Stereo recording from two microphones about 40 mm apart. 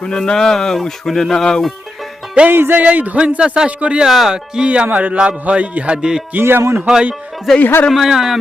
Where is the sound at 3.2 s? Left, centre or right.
Right.